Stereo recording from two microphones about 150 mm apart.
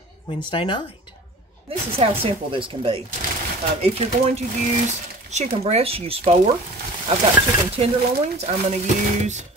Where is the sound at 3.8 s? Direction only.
45° right (ahead or behind).